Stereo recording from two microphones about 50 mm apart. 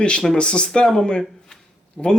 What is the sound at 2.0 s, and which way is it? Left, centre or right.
Speech, centre.